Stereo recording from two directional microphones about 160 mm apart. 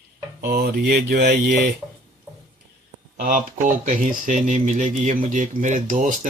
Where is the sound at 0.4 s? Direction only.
75° right (ahead or behind); by 1.6 s 90° right.